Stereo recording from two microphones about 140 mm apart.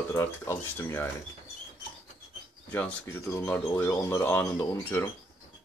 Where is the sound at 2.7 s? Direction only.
15° left (ahead or behind).